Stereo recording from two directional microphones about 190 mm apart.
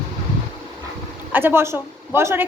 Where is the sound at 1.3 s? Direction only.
10° right (ahead or behind).